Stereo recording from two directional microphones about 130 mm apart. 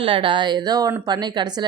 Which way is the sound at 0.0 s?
45° right (ahead or behind).